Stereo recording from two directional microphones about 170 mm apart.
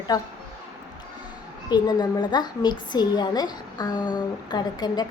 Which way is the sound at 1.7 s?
25° left (ahead or behind).